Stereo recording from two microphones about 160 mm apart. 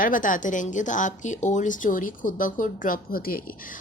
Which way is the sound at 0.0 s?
55° left (ahead or behind).